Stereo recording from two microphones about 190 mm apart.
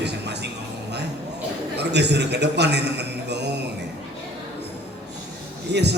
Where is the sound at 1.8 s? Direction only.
60° right (ahead or behind).